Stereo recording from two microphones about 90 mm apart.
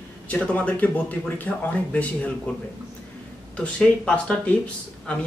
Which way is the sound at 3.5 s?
10° left (ahead or behind).